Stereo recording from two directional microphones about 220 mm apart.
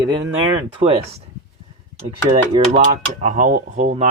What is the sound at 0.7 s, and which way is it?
Dishes, 25° right (ahead or behind).